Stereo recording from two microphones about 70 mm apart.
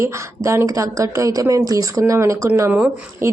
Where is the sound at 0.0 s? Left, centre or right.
Right.